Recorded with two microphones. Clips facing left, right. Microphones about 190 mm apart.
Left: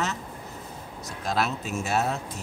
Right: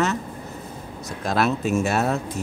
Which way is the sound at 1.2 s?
60° right (ahead or behind).